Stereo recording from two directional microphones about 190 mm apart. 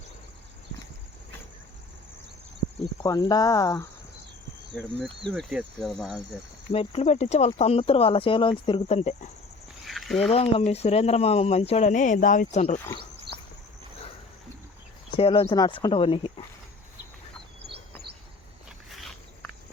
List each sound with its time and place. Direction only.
3.0 s speech: 20° left (ahead or behind)
4.7 s speech: 5° left (ahead or behind)
6.7 s speech: 30° left (ahead or behind)
9.8 s a sound: centre (ahead or behind)
10.2 s speech: 30° left (ahead or behind)
15.1 s speech: 30° left (ahead or behind)
18.9 s insect: centre (ahead or behind)